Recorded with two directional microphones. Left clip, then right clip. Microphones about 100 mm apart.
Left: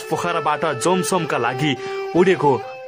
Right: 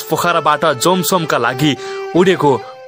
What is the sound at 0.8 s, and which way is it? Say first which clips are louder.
Speech: right 5 dB; 30° right (ahead or behind).